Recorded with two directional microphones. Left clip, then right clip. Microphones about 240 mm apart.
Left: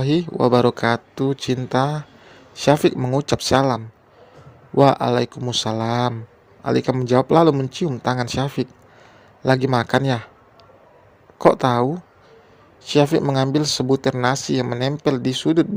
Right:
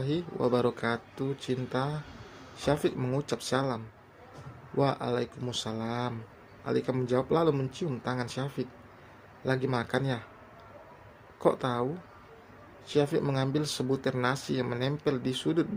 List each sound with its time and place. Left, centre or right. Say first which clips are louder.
0.0 s speech: left 11 dB; left
4.8 s speech: left 13 dB; left
11.3 s speech: left 12 dB; left